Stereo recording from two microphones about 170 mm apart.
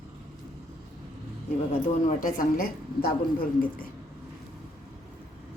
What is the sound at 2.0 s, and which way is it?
Speech, 55° left (ahead or behind).